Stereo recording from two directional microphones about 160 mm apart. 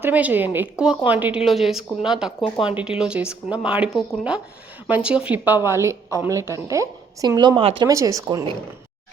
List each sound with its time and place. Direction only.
0.0 s a woman's voice: 10° right (ahead or behind); by 7.9 s 35° right (ahead or behind)
7.9 s a woman's voice: 20° right (ahead or behind)